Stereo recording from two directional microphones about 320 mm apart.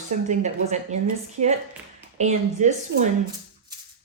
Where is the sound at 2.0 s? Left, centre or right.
Right.